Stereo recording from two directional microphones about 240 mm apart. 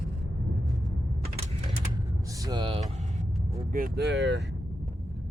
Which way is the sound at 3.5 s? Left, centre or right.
Right.